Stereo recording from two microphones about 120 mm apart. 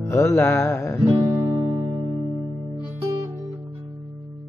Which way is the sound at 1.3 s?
25° right (ahead or behind).